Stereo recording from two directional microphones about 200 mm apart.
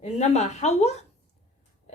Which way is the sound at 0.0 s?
35° left (ahead or behind).